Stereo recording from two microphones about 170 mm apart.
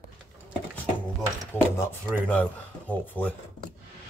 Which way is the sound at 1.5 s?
10° left (ahead or behind).